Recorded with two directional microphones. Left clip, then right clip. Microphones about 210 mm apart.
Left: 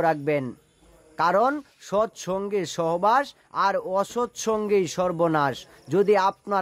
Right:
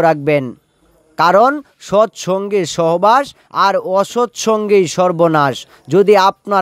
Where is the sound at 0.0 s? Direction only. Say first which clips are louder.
Right 10 dB; 35° right (ahead or behind).